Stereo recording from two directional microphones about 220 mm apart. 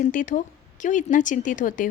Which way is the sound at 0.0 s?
35° left (ahead or behind).